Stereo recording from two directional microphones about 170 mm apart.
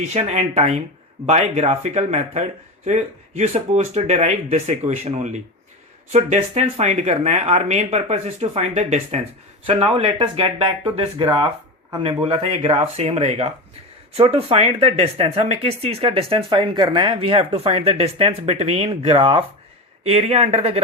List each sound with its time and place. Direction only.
0.0 s speech: 40° right (ahead or behind)